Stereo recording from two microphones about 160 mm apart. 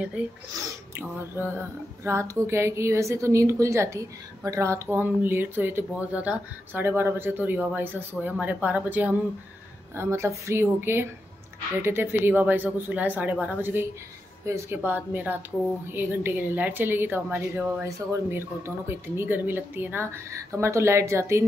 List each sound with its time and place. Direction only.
0.2 s speech: 10° right (ahead or behind)
2.0 s speech: 20° right (ahead or behind)